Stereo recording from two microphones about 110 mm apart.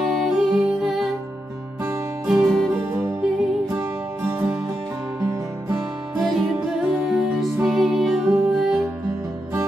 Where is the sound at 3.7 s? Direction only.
20° right (ahead or behind).